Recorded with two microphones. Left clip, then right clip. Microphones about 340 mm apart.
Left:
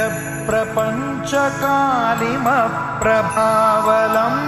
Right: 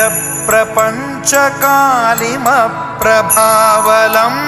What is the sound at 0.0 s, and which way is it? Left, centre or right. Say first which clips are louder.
Music: right 7 dB; right.